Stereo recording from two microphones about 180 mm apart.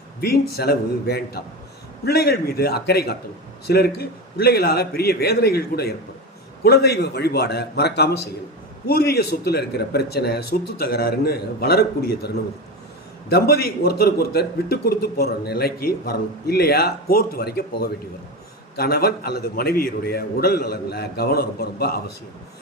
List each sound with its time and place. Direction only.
0.2 s a man's voice: 60° left (ahead or behind)
13.3 s a man's voice: 60° left (ahead or behind)